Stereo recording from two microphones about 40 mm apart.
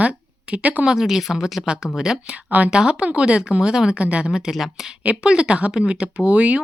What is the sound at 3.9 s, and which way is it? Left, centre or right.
Speech, right.